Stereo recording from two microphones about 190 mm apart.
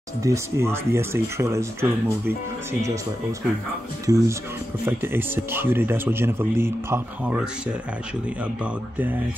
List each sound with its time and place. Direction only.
0.2 s speech: 15° right (ahead or behind)
4.0 s speech: 15° right (ahead or behind)
8.9 s speech: 10° right (ahead or behind)